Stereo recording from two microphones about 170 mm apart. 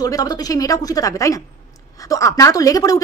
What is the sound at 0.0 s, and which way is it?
A woman's voice, 20° left (ahead or behind).